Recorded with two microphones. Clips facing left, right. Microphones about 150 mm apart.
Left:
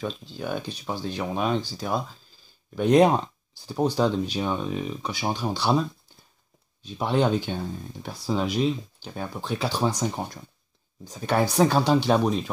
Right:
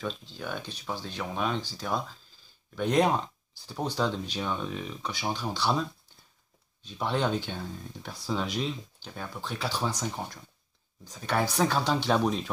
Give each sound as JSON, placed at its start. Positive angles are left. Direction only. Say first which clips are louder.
{"t": 0.0, "sound": "speech", "louder": "left 4 dB", "side_deg": 10}
{"t": 11.2, "sound": "speech", "louder": "left 6 dB", "side_deg": 15}